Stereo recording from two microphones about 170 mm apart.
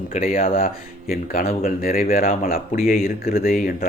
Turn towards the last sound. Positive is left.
turn(degrees=55)  # may be behind; listen again after turning